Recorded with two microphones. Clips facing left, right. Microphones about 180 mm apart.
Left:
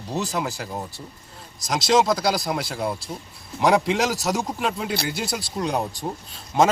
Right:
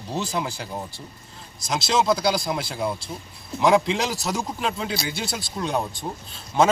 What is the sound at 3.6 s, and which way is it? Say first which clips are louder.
A man's voice: even; 10° left (ahead or behind).